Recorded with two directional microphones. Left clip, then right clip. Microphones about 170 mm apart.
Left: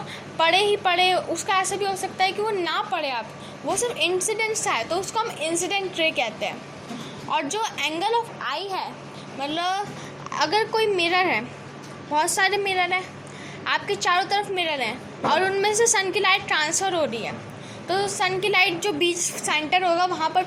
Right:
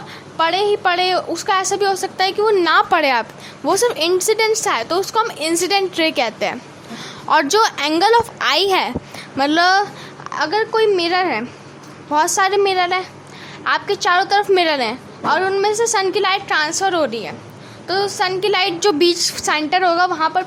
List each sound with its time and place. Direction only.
0.3 s a woman's voice: 25° right (ahead or behind); by 9.8 s 50° right (ahead or behind)
10.2 s a woman's voice: 25° right (ahead or behind)
14.5 s a woman's voice: 40° right (ahead or behind)
15.3 s a woman's voice: 20° right (ahead or behind)
16.9 s a woman's voice: 35° right (ahead or behind)